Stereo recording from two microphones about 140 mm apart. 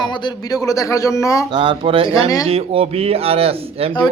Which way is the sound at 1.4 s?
35° right (ahead or behind).